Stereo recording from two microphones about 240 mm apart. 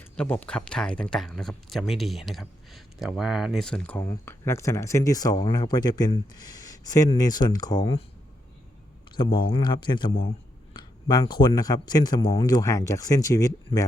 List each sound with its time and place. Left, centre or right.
0.0 s speech: centre
9.1 s speech: centre